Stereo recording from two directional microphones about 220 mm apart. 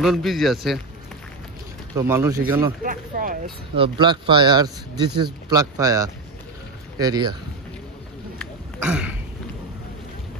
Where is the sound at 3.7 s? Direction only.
20° right (ahead or behind).